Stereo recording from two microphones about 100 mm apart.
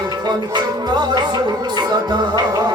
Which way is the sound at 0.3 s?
45° right (ahead or behind).